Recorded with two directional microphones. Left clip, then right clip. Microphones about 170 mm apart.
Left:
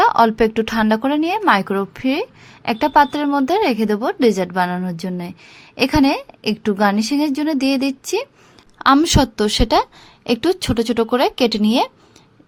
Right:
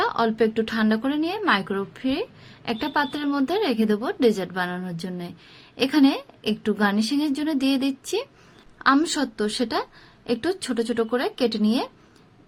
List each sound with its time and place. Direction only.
0.0 s a woman's voice: 40° left (ahead or behind)